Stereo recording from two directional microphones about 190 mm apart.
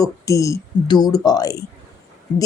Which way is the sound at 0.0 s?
15° left (ahead or behind).